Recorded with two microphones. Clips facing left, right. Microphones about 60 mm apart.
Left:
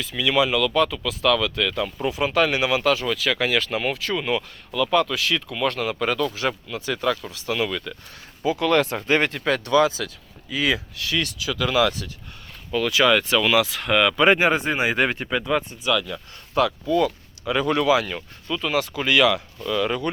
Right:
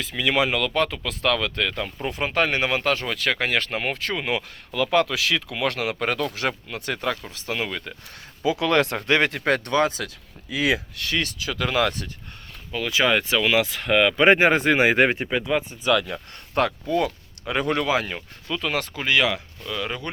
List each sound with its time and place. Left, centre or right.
0.0 s speech: right
3.9 s speech: right
8.4 s speech: right
9.4 s speech: right
10.5 s speech: right
11.1 s speech: right
12.7 s speech: centre; by 14.3 s right
14.3 s speech: right
15.1 s speech: centre
15.8 s speech: right
18.4 s speech: right
18.9 s speech: right
19.6 s speech: centre